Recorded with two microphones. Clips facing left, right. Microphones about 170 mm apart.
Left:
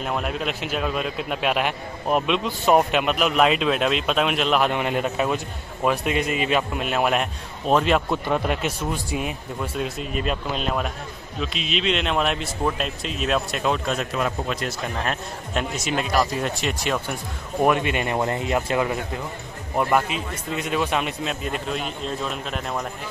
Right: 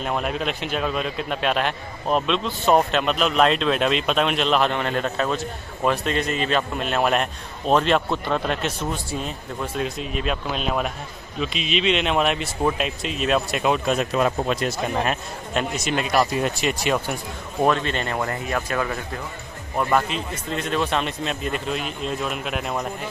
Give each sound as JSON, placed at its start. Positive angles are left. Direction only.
{"t": 0.0, "sound": "a man's voice", "side_deg": 0}
{"t": 14.1, "sound": "a man's voice", "side_deg": -30}
{"t": 15.5, "sound": "speech", "side_deg": 0}
{"t": 17.6, "sound": "a man's voice", "side_deg": 15}
{"t": 19.8, "sound": "speech", "side_deg": 10}